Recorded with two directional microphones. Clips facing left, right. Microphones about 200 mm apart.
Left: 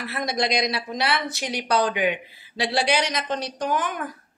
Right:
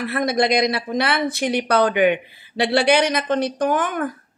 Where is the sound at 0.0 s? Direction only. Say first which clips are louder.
Right 6 dB; 55° right (ahead or behind).